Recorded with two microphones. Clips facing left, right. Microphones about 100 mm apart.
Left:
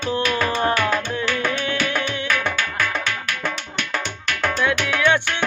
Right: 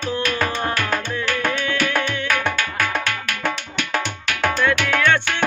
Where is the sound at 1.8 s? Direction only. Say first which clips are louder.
Right 2 dB; 55° right (ahead or behind).